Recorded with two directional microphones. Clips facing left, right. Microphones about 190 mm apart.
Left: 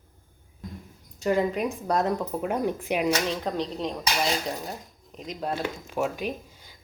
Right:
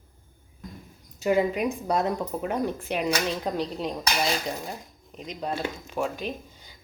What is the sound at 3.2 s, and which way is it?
Speech, 5° right (ahead or behind).